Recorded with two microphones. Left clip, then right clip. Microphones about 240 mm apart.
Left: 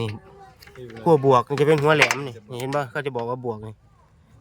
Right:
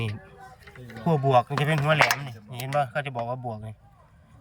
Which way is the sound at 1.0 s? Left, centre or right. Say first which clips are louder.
Left 5 dB; centre.